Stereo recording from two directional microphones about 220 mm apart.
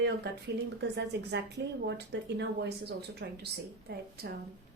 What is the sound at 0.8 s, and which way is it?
Speech, 50° right (ahead or behind).